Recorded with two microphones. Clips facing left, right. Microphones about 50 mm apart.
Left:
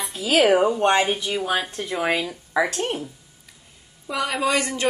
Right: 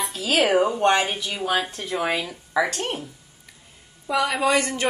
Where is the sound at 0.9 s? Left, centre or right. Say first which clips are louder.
Left 2 dB; left.